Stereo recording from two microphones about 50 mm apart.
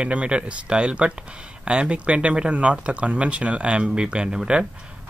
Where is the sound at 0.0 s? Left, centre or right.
Right.